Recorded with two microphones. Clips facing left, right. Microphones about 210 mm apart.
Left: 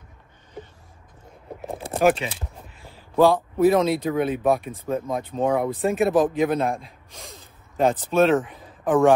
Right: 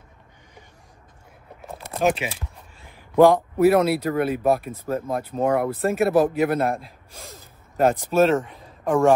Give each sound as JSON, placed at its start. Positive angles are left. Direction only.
{"t": 1.7, "sound": "a sound", "side_deg": 30}
{"t": 2.9, "sound": "a man's voice", "side_deg": -15}
{"t": 8.2, "sound": "speech", "side_deg": 0}